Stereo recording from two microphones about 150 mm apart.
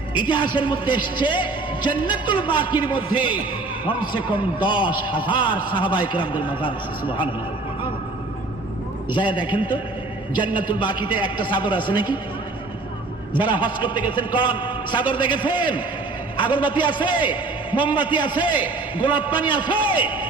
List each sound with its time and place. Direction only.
0.2 s a man's voice: 30° left (ahead or behind)
9.1 s a man's voice: 30° left (ahead or behind)
13.3 s a man's voice: 30° left (ahead or behind)